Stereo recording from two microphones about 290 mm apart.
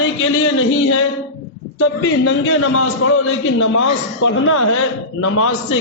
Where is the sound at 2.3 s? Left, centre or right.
Left.